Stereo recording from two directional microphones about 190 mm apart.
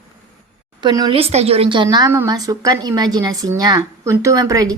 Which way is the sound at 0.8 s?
25° right (ahead or behind).